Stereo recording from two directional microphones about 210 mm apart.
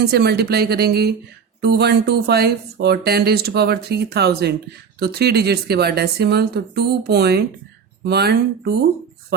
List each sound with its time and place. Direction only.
0.0 s speech: 50° right (ahead or behind)